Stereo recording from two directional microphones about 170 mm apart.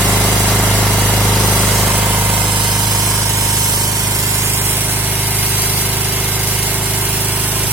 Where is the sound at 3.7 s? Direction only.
20° right (ahead or behind).